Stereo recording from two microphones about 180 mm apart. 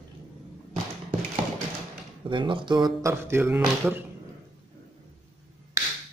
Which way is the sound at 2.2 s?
25° right (ahead or behind).